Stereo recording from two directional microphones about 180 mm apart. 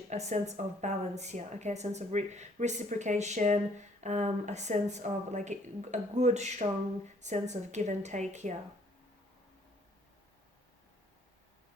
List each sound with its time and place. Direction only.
0.1 s a woman's voice: 40° right (ahead or behind)